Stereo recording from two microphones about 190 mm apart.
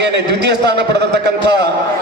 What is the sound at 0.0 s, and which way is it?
A man's voice, 65° right (ahead or behind).